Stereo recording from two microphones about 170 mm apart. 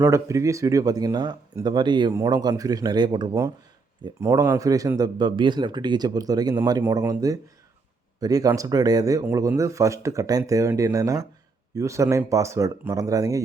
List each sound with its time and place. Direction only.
0.0 s speech: 15° right (ahead or behind)